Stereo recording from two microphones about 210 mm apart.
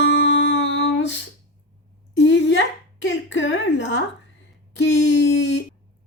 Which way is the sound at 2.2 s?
60° left (ahead or behind).